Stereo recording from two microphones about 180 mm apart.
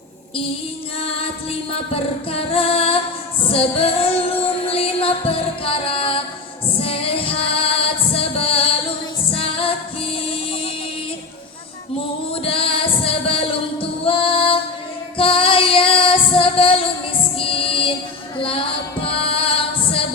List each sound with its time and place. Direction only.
1.9 s female singing: 35° left (ahead or behind)
3.4 s music: 30° left (ahead or behind)
12.3 s music: 30° left (ahead or behind)
15.2 s female singing: 30° left (ahead or behind)
18.3 s music: 30° left (ahead or behind)